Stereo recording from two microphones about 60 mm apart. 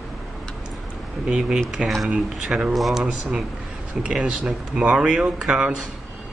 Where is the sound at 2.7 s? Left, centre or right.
Centre.